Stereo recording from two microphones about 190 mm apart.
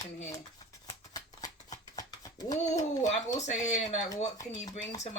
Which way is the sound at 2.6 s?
35° left (ahead or behind).